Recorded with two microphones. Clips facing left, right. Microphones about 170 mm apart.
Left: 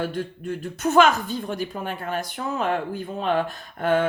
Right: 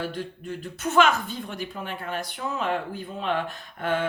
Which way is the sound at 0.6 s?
45° left (ahead or behind).